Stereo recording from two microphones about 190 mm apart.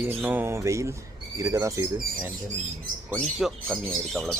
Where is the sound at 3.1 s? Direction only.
Centre (ahead or behind).